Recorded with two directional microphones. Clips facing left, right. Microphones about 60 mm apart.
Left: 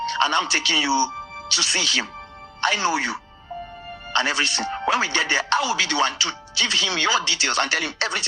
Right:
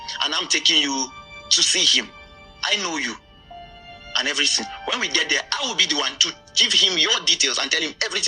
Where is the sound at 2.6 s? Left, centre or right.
Left.